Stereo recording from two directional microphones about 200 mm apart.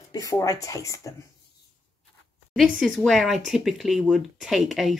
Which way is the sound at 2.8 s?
Centre (ahead or behind).